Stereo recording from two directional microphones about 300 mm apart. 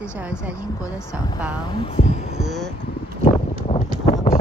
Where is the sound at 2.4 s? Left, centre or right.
Centre.